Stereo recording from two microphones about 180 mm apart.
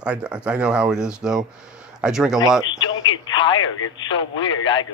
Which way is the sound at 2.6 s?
25° left (ahead or behind).